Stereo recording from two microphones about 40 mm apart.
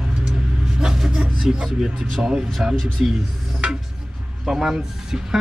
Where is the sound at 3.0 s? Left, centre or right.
Centre.